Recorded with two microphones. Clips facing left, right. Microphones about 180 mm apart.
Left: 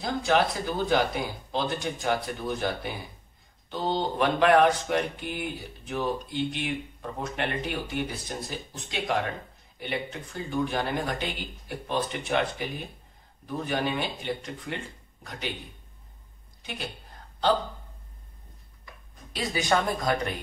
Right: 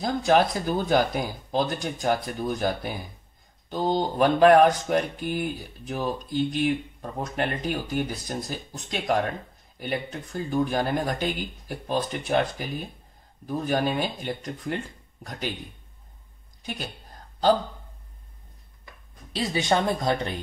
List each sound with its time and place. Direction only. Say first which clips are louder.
0.0 s speech: right 3 dB; 40° right (ahead or behind)
13.7 s speech: right 4 dB; 40° right (ahead or behind)
19.3 s speech: right 2 dB; 30° right (ahead or behind)